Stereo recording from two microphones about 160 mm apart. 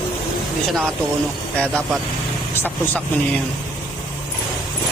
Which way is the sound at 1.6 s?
5° left (ahead or behind).